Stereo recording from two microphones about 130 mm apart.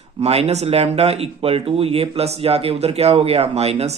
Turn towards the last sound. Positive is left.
turn(degrees=-55)  # may be behind; listen again after turning